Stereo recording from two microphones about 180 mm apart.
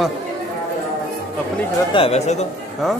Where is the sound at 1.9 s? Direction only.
35° left (ahead or behind).